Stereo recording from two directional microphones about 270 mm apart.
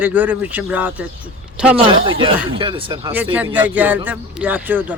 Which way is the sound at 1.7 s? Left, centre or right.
Centre.